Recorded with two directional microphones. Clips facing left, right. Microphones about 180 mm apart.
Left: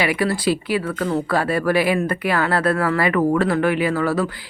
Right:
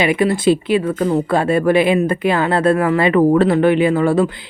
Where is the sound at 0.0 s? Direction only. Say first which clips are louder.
Right 5 dB; 20° right (ahead or behind).